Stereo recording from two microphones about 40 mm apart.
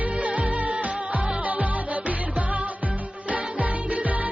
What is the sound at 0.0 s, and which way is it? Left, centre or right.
Music, right.